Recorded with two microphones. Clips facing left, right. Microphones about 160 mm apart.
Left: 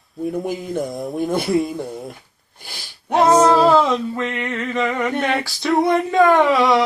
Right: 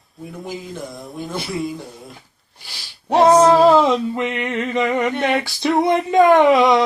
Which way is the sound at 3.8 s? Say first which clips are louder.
Right 2 dB; 20° right (ahead or behind).